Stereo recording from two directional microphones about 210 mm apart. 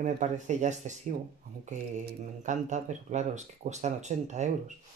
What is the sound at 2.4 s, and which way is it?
Speech, 35° right (ahead or behind).